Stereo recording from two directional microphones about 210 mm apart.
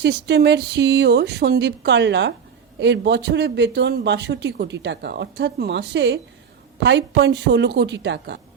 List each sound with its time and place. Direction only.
0.0 s speech: 55° right (ahead or behind)